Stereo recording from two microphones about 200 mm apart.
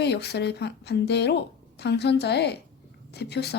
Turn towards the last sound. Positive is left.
turn(degrees=55)  # may be behind; listen again after turning